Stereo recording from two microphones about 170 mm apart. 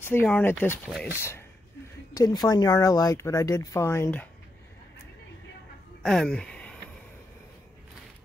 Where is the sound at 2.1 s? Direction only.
25° left (ahead or behind).